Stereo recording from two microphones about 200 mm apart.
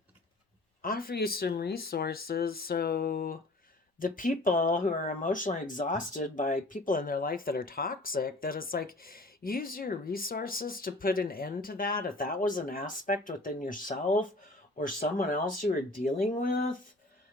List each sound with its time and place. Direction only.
0.8 s speech: 45° left (ahead or behind)